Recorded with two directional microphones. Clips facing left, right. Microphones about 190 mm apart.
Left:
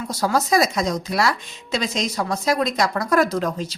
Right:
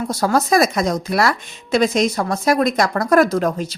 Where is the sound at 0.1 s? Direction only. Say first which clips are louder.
Right 3 dB; 50° right (ahead or behind).